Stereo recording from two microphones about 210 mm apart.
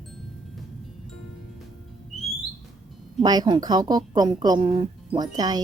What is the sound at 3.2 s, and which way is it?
A woman's voice, 20° right (ahead or behind).